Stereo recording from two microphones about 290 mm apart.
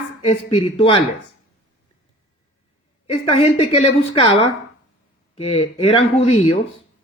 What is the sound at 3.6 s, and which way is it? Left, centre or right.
Speech, centre.